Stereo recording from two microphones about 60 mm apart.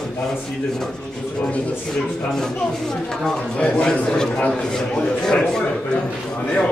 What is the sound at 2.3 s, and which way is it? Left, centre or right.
A man's voice, centre.